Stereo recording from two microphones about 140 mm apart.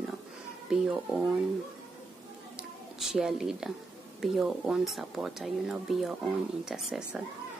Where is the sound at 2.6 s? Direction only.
5° right (ahead or behind).